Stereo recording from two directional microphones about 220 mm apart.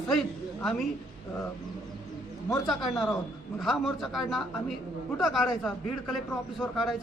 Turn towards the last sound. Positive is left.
turn(degrees=0)  # may be behind; listen again after turning